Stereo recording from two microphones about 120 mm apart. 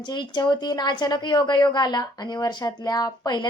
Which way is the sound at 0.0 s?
40° left (ahead or behind).